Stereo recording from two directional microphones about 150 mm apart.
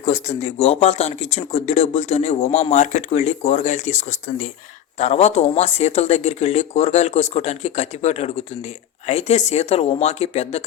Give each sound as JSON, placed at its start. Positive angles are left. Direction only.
{"t": 0.0, "sound": "speech", "side_deg": 50}